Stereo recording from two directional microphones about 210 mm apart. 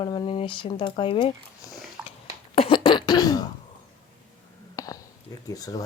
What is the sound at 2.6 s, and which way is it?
Throat clearing, 25° left (ahead or behind).